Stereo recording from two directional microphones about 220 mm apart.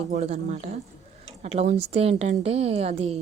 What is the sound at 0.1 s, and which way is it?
A woman's voice, 30° right (ahead or behind).